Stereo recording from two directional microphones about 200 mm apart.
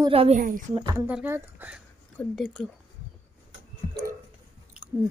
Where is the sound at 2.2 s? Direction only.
Centre (ahead or behind).